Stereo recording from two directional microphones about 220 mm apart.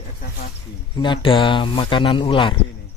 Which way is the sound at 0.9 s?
20° left (ahead or behind).